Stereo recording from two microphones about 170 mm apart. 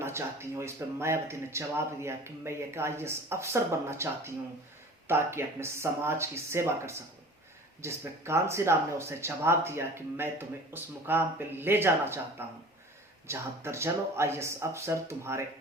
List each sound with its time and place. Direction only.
0.0 s speech: 15° right (ahead or behind)
13.2 s speech: 15° right (ahead or behind)